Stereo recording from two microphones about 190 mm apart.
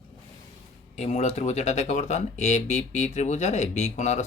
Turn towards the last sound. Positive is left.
turn(degrees=35)  # may be behind; listen again after turning